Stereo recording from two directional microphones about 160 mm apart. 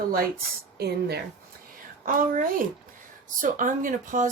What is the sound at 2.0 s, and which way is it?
Speech, 60° right (ahead or behind).